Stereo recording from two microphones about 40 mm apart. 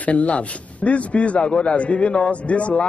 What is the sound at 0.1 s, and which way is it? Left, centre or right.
A man's voice, left.